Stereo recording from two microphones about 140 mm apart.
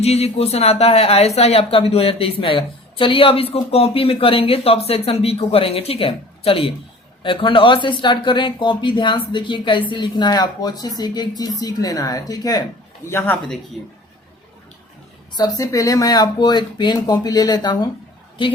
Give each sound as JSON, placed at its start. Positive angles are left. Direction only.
{"t": 0.0, "sound": "a woman's voice", "side_deg": 45}
{"t": 13.1, "sound": "speech", "side_deg": 15}
{"t": 15.4, "sound": "speech", "side_deg": 25}